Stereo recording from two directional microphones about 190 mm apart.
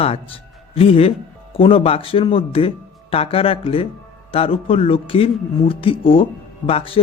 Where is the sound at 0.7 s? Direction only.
30° left (ahead or behind).